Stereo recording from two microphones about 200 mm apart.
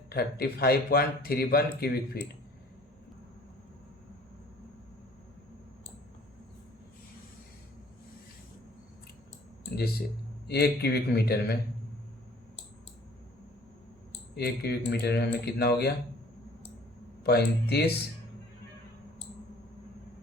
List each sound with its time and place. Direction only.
0.1 s a man's voice: 50° left (ahead or behind)
9.7 s a man's voice: 50° left (ahead or behind)
14.3 s a man's voice: 50° left (ahead or behind)
17.2 s a man's voice: 55° left (ahead or behind)